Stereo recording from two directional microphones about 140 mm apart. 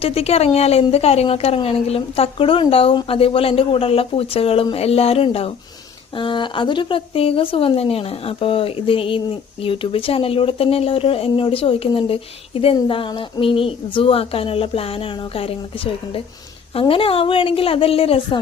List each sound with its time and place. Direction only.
0.0 s a woman's voice: 45° left (ahead or behind)